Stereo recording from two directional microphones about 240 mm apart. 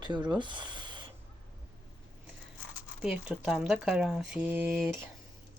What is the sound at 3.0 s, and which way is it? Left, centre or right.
Speech, centre.